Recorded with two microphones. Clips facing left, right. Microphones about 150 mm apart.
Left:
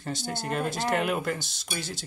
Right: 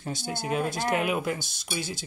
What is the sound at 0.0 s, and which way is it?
Speech, centre (ahead or behind).